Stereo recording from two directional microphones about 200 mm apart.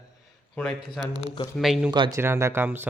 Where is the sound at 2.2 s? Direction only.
15° right (ahead or behind).